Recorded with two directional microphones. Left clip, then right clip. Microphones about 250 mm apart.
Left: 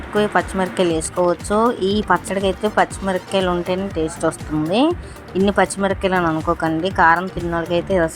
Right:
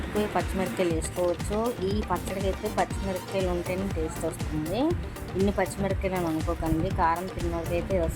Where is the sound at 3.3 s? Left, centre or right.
Centre.